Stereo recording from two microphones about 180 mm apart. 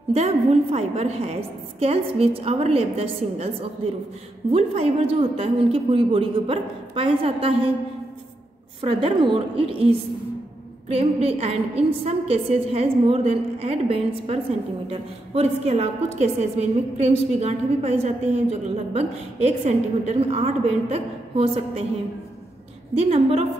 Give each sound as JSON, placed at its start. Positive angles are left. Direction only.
{"t": 0.1, "sound": "a woman's voice", "side_deg": -35}
{"t": 8.8, "sound": "a woman's voice", "side_deg": -30}
{"t": 22.9, "sound": "a woman's voice", "side_deg": -35}